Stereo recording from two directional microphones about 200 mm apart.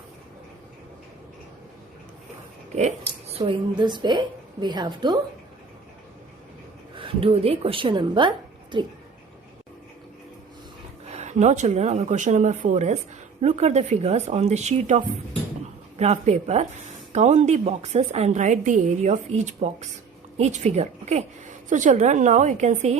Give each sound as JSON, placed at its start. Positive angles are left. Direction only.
{"t": 2.7, "sound": "speech", "side_deg": -35}
{"t": 6.9, "sound": "speech", "side_deg": -25}
{"t": 11.1, "sound": "a woman's voice", "side_deg": -35}